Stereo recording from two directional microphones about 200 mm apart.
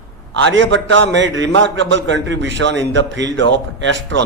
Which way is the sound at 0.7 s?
65° right (ahead or behind).